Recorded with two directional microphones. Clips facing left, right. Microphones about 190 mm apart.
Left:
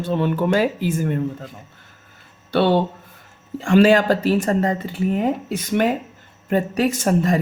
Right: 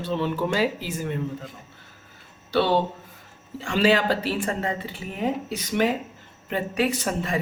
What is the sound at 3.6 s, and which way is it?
Speech, 50° left (ahead or behind).